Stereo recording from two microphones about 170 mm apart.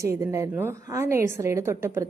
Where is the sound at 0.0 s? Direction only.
15° right (ahead or behind).